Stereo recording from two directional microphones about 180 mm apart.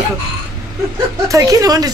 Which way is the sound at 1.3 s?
20° right (ahead or behind).